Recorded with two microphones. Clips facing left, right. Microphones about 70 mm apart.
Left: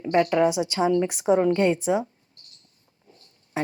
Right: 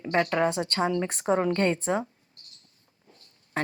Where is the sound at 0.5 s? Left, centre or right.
Centre.